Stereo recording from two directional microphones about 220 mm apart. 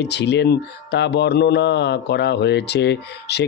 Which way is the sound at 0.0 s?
50° left (ahead or behind).